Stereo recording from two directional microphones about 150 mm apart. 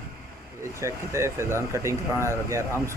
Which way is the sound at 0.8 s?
20° right (ahead or behind).